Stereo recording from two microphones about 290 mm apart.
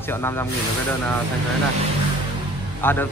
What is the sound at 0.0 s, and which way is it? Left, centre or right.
Speech, centre.